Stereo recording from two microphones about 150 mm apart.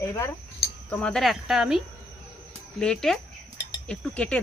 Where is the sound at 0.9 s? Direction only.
5° left (ahead or behind).